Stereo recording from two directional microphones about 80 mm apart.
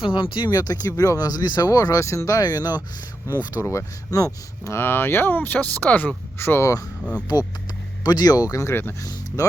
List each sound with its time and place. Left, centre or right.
0.0 s speech: left
0.5 s speech: left
3.2 s speech: right
3.5 s speech: left
4.8 s speech: left
6.4 s speech: left
8.0 s speech: left
8.6 s speech: left
9.4 s speech: left